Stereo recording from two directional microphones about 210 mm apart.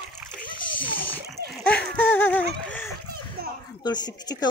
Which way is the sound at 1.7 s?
5° left (ahead or behind).